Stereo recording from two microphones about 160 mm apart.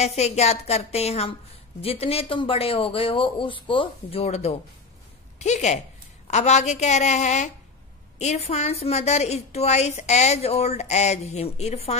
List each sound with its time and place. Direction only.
0.0 s a woman's voice: 45° left (ahead or behind)